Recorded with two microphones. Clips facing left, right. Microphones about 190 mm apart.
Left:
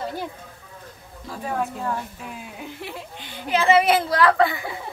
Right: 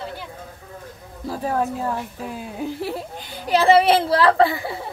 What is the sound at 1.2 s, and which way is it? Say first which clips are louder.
Speech: right 4 dB; 40° right (ahead or behind).